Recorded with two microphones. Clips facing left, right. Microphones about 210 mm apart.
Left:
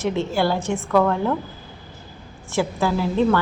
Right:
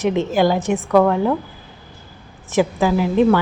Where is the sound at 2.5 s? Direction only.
15° right (ahead or behind).